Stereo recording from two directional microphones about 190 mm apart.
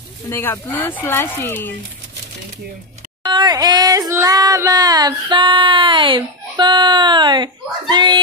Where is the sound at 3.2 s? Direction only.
20° right (ahead or behind).